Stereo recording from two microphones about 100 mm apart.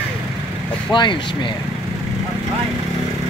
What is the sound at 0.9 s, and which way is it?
Speech, 50° left (ahead or behind).